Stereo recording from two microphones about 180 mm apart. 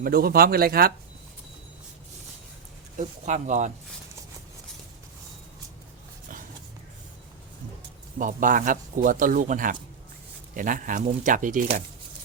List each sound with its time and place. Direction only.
0.0 s speech: 55° right (ahead or behind)
3.0 s speech: 40° right (ahead or behind)
8.2 s speech: 45° right (ahead or behind)